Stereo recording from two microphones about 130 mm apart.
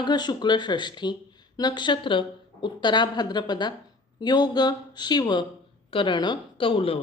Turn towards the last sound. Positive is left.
turn(degrees=45)  # may be behind; listen again after turning